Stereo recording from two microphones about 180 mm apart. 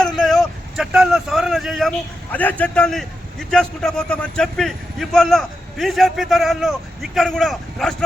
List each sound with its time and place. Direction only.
0.0 s vehicle: centre (ahead or behind)
2.3 s a man's voice: 10° left (ahead or behind)